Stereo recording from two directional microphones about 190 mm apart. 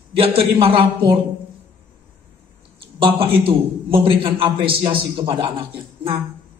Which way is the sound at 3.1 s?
30° right (ahead or behind).